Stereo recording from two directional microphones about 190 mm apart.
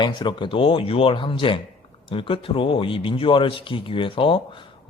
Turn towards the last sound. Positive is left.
turn(degrees=30)  # may be behind; listen again after turning